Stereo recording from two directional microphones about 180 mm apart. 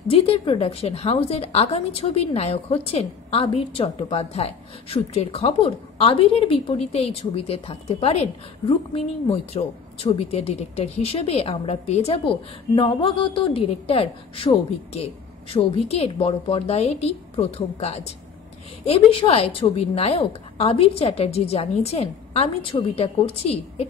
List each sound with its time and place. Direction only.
0.1 s a woman's voice: 35° left (ahead or behind)